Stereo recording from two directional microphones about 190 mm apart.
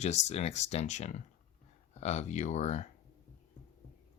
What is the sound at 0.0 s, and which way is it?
Speech, 35° left (ahead or behind).